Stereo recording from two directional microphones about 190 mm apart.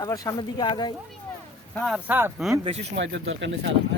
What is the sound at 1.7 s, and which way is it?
Speech, centre (ahead or behind).